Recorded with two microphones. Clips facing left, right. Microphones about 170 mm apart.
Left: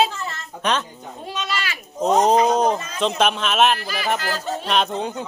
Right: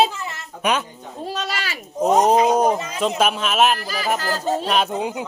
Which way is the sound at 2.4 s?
10° right (ahead or behind).